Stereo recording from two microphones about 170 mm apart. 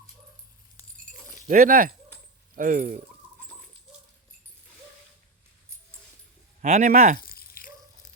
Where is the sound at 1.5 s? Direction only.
55° right (ahead or behind).